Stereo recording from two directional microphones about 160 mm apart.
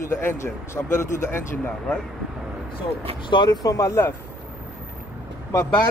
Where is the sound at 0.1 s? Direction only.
15° left (ahead or behind).